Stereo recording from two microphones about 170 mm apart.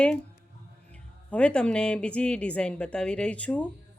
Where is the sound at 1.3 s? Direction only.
5° left (ahead or behind).